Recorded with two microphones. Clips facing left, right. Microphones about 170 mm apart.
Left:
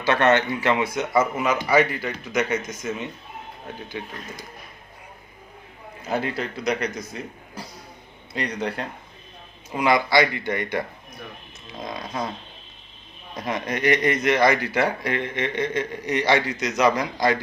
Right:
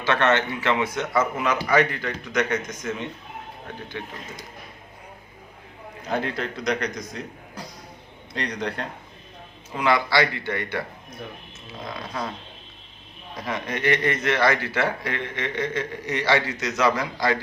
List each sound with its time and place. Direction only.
0.0 s a man's voice: 10° left (ahead or behind)
6.1 s a man's voice: 5° left (ahead or behind)
13.5 s a man's voice: 15° left (ahead or behind)